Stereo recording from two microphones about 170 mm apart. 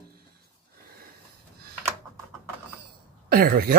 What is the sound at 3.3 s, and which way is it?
Speech, 60° right (ahead or behind).